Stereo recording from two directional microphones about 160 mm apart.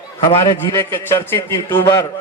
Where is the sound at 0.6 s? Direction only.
15° left (ahead or behind).